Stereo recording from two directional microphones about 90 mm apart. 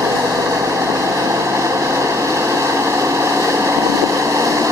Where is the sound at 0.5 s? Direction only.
35° right (ahead or behind).